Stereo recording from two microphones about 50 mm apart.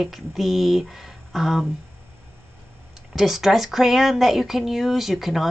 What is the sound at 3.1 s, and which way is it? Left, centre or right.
Speech, centre.